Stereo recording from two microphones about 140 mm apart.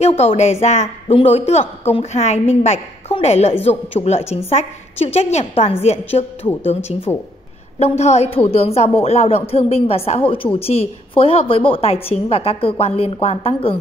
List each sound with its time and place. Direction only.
0.2 s a woman's voice: 50° left (ahead or behind)
8.0 s a woman's voice: 50° left (ahead or behind)